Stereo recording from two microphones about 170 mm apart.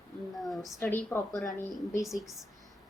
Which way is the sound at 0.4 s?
Centre (ahead or behind).